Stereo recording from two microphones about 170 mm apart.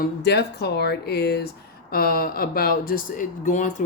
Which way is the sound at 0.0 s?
75° left (ahead or behind).